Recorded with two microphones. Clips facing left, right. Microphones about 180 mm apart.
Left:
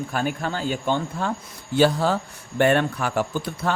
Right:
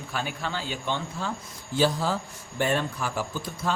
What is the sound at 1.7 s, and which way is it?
Speech, 65° left (ahead or behind).